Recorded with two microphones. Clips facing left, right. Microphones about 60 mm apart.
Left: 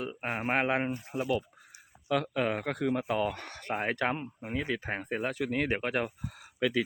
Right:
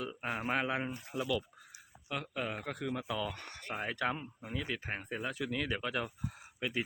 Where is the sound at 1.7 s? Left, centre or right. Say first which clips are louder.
Left 10 dB; left.